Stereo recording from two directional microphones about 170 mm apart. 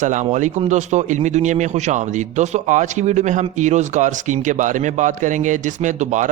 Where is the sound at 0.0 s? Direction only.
45° right (ahead or behind).